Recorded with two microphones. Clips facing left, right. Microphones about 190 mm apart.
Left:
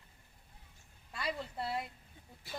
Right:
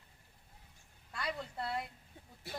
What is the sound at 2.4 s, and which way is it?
Speech, 65° right (ahead or behind).